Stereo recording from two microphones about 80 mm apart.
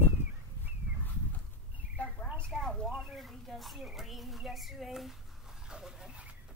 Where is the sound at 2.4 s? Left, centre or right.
Centre.